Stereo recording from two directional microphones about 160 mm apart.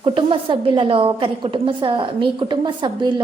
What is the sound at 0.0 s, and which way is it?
A woman's voice, 30° right (ahead or behind).